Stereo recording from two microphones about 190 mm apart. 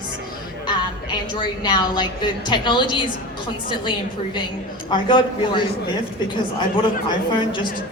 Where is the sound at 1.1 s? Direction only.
25° left (ahead or behind).